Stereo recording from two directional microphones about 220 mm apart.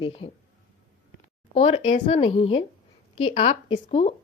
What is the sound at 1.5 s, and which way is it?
Speech, 30° left (ahead or behind).